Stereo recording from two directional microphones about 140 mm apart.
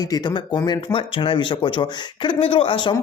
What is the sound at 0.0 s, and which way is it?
Speech, 30° left (ahead or behind).